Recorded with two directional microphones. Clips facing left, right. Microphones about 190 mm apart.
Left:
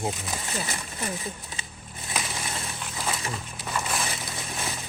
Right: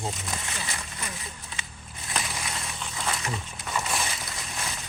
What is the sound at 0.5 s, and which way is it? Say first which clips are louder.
Speech: left 4 dB; 35° left (ahead or behind).